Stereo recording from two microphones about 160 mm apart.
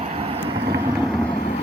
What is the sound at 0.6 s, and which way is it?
Vehicle, 90° right.